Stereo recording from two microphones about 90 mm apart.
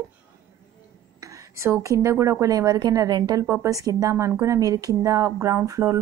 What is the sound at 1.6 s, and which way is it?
A woman's voice, 35° right (ahead or behind).